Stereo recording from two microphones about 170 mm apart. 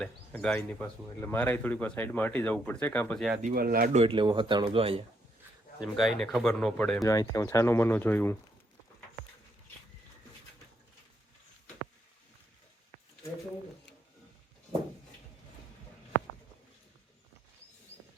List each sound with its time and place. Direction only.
0.0 s speech: 5° left (ahead or behind)
3.4 s speech: 60° right (ahead or behind)
3.9 s speech: 30° right (ahead or behind)
5.8 s speech: centre (ahead or behind)
7.0 s speech: 20° left (ahead or behind)